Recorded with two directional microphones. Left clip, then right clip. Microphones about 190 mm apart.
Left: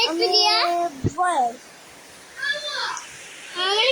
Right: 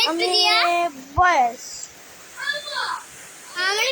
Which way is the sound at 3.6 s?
25° left (ahead or behind).